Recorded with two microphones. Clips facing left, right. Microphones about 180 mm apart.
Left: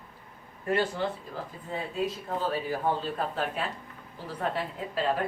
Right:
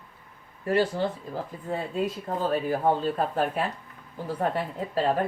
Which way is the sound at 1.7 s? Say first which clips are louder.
Right 3 dB; 50° right (ahead or behind).